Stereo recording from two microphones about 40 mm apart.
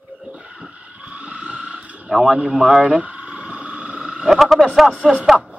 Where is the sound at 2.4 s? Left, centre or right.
Right.